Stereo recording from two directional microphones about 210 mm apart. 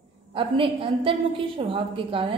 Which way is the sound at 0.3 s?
25° right (ahead or behind).